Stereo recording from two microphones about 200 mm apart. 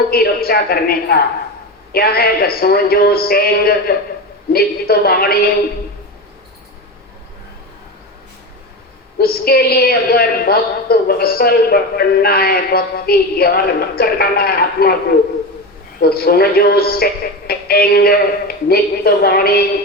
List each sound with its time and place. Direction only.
0.1 s a woman's voice: 50° left (ahead or behind)
9.1 s a woman's voice: 50° left (ahead or behind)
16.0 s a woman's voice: 50° left (ahead or behind)